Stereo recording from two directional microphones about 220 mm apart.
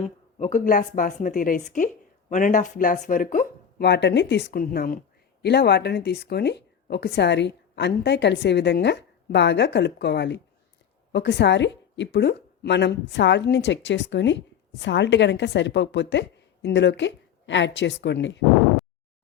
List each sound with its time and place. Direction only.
0.3 s a woman's voice: 35° left (ahead or behind); by 18.4 s 55° left (ahead or behind)